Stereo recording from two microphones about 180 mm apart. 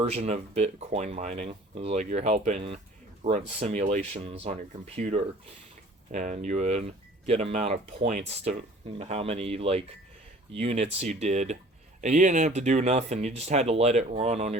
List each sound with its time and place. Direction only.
0.0 s speech: 35° right (ahead or behind)
9.0 s speech: 35° right (ahead or behind)